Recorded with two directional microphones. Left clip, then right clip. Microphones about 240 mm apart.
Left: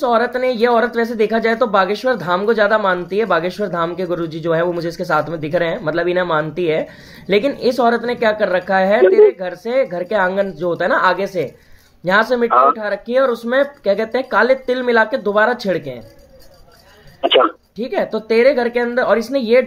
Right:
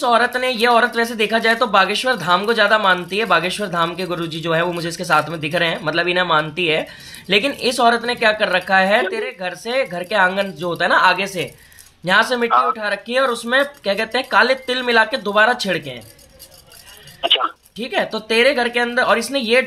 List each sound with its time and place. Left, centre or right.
0.0 s speech: centre
17.2 s speech: centre
17.7 s speech: centre